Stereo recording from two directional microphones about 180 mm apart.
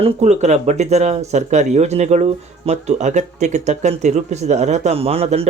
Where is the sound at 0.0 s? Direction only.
40° right (ahead or behind).